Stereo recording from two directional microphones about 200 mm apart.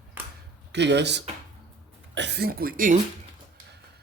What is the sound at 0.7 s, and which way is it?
Speech, 60° right (ahead or behind).